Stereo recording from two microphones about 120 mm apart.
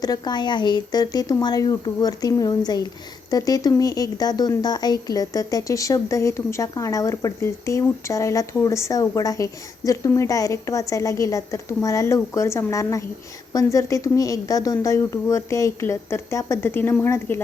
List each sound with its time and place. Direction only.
0.0 s speech: 35° left (ahead or behind); by 17.4 s 20° left (ahead or behind)